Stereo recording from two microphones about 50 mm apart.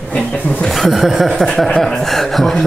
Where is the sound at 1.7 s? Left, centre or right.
Centre.